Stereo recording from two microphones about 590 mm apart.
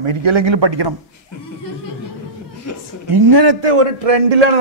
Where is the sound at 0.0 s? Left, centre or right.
Right.